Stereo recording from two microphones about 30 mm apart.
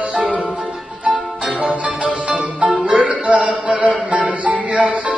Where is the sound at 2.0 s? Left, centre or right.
Right.